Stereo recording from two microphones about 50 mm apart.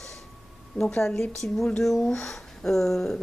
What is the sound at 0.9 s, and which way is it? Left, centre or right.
Speech, centre.